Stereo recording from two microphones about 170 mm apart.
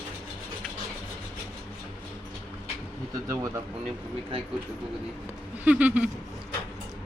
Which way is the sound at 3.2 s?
20° right (ahead or behind).